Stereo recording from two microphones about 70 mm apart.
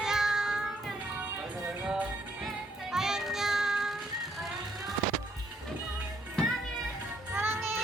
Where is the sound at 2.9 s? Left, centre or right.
Centre.